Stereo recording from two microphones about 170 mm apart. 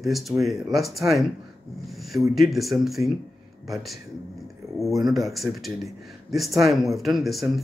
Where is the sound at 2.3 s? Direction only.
Centre (ahead or behind).